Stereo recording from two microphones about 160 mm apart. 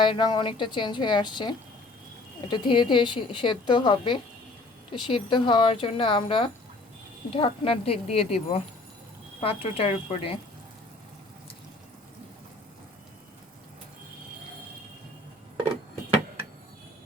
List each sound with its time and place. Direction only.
0.0 s a woman's voice: 30° left (ahead or behind)